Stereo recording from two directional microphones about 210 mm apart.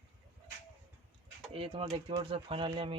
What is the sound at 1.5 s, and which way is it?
Speech, 25° right (ahead or behind).